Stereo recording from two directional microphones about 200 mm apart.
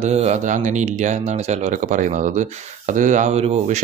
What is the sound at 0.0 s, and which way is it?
Speech, 35° right (ahead or behind).